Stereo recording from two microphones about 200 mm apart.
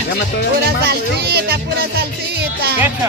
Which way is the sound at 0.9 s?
55° right (ahead or behind).